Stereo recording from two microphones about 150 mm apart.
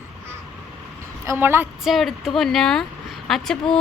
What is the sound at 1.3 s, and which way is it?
Speech, 15° right (ahead or behind).